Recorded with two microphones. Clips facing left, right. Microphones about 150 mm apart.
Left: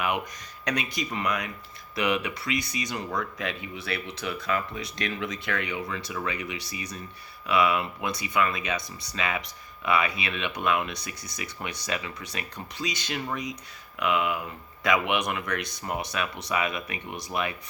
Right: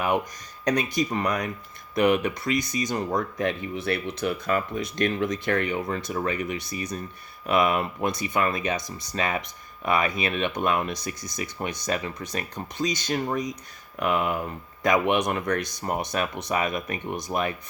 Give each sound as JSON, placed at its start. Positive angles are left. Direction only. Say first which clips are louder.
{"t": 0.6, "sound": "speech", "louder": "right 6 dB", "side_deg": -40}